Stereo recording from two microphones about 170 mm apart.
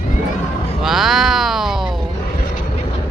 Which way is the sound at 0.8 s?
Centre (ahead or behind).